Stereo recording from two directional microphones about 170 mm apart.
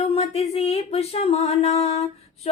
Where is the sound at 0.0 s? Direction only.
35° left (ahead or behind).